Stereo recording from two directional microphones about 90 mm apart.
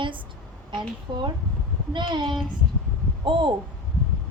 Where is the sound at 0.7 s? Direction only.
60° right (ahead or behind).